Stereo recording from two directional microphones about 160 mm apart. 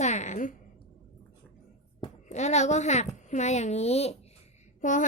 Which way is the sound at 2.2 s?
45° left (ahead or behind).